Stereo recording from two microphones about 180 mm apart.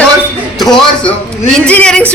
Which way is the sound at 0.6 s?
Centre (ahead or behind).